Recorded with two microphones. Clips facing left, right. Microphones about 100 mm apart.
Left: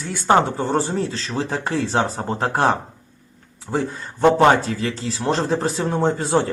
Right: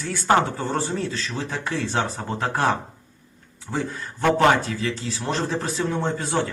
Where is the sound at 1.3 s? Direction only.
40° left (ahead or behind).